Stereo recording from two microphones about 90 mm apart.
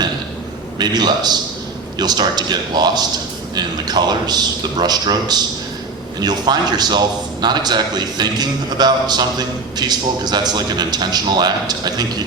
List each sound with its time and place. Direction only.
0.8 s a man's voice: 50° right (ahead or behind)